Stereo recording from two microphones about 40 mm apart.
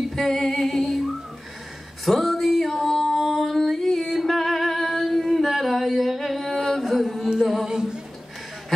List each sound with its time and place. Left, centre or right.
0.1 s music: centre
7.6 s music: centre